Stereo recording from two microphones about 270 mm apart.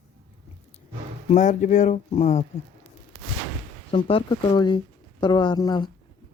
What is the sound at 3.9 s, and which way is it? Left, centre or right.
Speech, centre.